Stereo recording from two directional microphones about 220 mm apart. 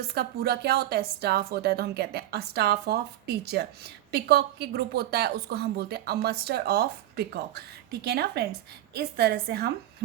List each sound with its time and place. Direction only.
0.1 s a woman's voice: 45° right (ahead or behind)